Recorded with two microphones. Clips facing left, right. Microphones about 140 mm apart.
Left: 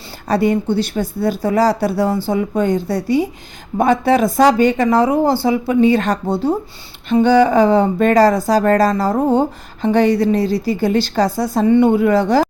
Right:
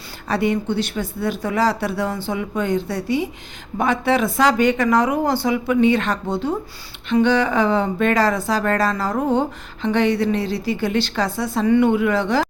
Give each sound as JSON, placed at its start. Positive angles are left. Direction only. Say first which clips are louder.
{"t": 0.3, "sound": "speech", "louder": "left 5 dB", "side_deg": 40}